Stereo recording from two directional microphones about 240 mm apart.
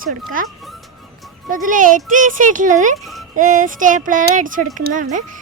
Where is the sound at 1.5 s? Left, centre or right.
Right.